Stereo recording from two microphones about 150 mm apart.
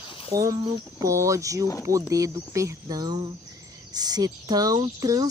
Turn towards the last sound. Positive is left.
turn(degrees=-25)  # may be behind; listen again after turning